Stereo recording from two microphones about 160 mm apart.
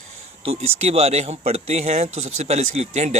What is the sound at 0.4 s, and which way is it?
Speech, 40° right (ahead or behind).